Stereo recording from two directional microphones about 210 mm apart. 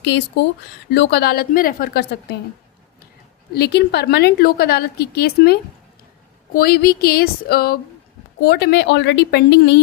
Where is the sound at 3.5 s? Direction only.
50° left (ahead or behind).